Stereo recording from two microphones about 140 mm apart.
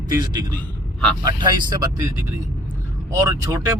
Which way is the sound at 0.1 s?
30° right (ahead or behind).